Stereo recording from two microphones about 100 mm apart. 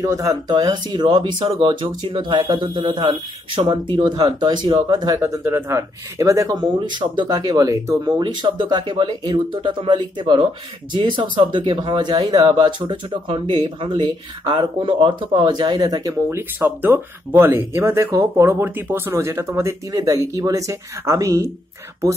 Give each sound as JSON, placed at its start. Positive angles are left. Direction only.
{"t": 0.0, "sound": "speech", "side_deg": -35}
{"t": 5.2, "sound": "speech", "side_deg": -25}
{"t": 8.2, "sound": "speech", "side_deg": -50}